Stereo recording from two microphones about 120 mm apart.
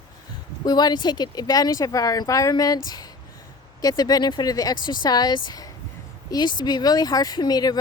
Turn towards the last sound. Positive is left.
turn(degrees=35)  # may be behind; listen again after turning